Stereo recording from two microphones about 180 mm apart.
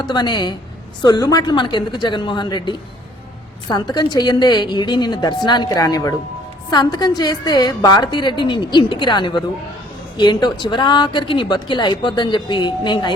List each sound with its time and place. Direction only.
0.0 s speech: 25° left (ahead or behind)